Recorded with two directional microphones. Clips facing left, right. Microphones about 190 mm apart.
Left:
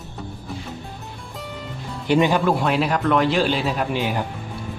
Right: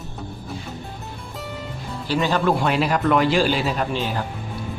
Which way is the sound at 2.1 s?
15° left (ahead or behind).